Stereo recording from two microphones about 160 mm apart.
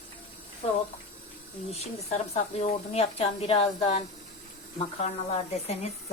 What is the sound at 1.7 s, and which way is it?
Speech, 40° left (ahead or behind).